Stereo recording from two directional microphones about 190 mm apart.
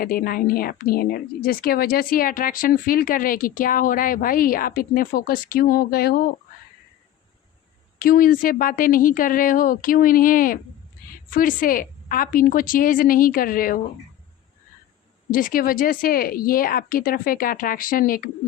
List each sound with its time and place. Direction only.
0.0 s speech: 50° left (ahead or behind)
7.9 s speech: 50° left (ahead or behind)
15.3 s speech: 45° left (ahead or behind)